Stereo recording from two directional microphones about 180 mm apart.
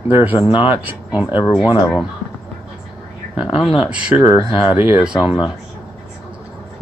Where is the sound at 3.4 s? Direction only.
Centre (ahead or behind).